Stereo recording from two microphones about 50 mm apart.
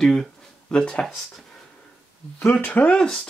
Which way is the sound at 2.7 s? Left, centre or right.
Left.